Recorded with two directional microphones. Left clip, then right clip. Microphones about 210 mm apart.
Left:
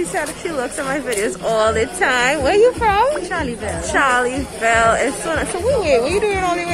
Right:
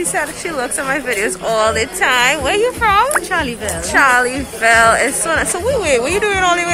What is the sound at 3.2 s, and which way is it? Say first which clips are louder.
Speech: right 5 dB; 5° right (ahead or behind).